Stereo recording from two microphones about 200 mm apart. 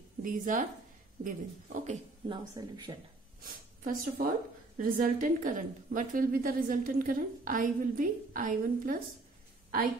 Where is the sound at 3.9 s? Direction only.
45° right (ahead or behind).